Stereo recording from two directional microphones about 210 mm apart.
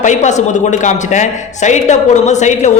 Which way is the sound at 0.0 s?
35° left (ahead or behind).